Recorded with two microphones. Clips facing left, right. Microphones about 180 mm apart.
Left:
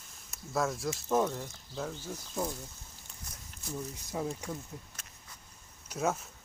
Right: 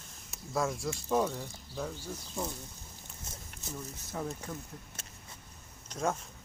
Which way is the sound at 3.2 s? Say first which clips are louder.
Right 3 dB; 25° right (ahead or behind).